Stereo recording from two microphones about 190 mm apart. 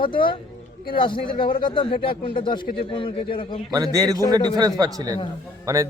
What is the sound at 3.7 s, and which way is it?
A man's voice, 20° right (ahead or behind).